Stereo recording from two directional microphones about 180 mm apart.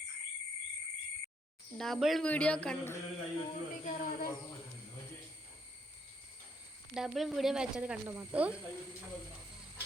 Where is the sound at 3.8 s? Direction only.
50° left (ahead or behind).